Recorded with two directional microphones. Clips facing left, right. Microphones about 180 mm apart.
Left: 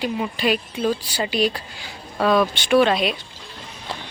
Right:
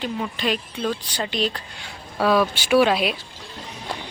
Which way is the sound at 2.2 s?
5° right (ahead or behind).